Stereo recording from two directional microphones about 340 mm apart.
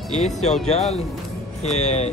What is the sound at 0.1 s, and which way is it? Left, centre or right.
Speech, centre.